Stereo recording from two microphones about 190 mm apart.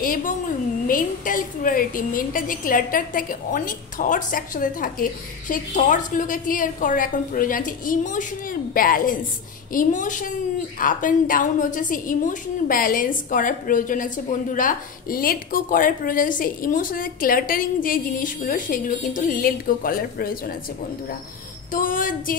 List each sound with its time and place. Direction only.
0.0 s a sound: 45° left (ahead or behind)
0.8 s a woman's voice: 45° left (ahead or behind)
21.7 s a woman's voice: 45° left (ahead or behind)